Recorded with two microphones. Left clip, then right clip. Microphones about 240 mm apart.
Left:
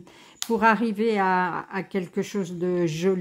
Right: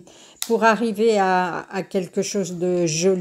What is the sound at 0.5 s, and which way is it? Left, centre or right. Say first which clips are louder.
Speech: right 3 dB; centre.